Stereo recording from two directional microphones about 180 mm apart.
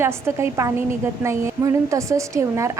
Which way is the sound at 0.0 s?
15° right (ahead or behind).